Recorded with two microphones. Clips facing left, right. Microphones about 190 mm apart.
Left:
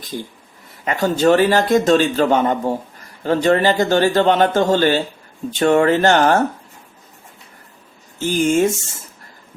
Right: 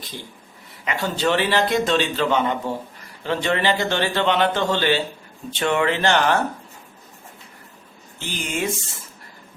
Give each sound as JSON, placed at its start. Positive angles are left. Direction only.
{"t": 0.1, "sound": "a man's voice", "side_deg": 45}
{"t": 8.2, "sound": "a man's voice", "side_deg": 45}